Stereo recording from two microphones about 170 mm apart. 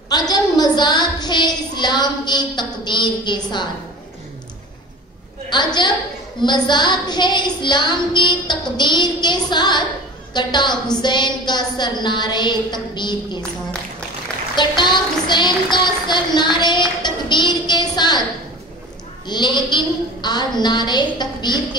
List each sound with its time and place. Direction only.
0.1 s a woman's voice: 25° left (ahead or behind)
5.5 s child singing: 25° left (ahead or behind)
14.5 s child singing: 25° left (ahead or behind)
19.2 s a woman's voice: 25° left (ahead or behind)
19.7 s child singing: 25° left (ahead or behind)